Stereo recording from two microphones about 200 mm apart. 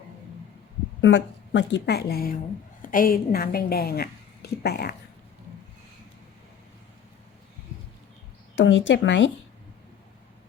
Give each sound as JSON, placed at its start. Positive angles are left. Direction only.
{"t": 1.0, "sound": "a woman's voice", "side_deg": 60}
{"t": 8.5, "sound": "speech", "side_deg": 70}